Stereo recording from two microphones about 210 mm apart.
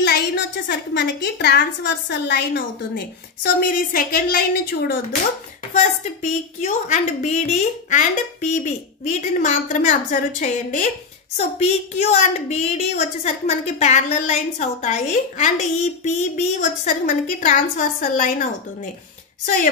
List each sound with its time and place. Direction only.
0.0 s a woman's voice: 50° left (ahead or behind)
6.2 s a woman's voice: 35° left (ahead or behind)